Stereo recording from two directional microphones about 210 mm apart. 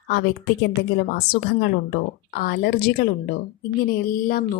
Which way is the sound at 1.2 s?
60° left (ahead or behind).